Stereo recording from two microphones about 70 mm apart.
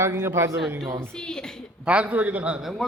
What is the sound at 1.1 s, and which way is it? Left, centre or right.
Speech, centre.